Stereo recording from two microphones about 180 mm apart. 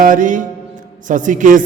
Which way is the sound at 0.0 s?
45° right (ahead or behind).